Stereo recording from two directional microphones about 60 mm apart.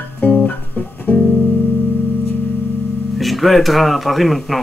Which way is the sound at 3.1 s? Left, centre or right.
Centre.